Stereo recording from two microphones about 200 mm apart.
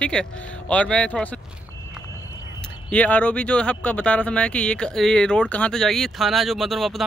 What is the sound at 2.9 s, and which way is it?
Speech, 5° left (ahead or behind).